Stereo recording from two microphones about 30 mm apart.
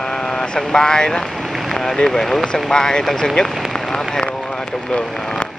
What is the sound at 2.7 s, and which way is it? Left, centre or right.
Speech, left.